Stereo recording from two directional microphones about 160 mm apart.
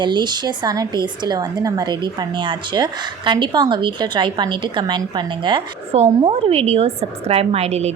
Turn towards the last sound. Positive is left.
turn(degrees=-40)  # may be behind; listen again after turning